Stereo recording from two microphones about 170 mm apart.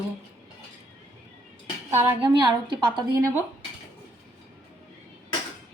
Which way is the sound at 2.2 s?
25° right (ahead or behind).